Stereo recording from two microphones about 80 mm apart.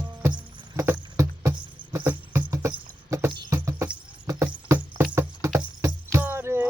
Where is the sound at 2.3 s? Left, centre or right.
Right.